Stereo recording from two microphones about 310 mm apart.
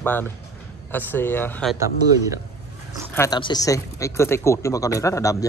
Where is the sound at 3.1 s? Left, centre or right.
Centre.